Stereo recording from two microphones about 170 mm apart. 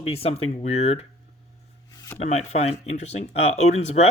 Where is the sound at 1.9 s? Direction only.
20° left (ahead or behind).